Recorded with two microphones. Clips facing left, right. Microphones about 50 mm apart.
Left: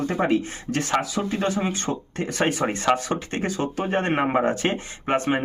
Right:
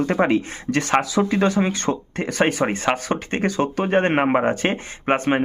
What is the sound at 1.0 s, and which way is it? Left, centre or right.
Speech, right.